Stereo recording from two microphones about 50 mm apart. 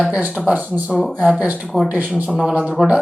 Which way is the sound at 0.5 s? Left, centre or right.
Right.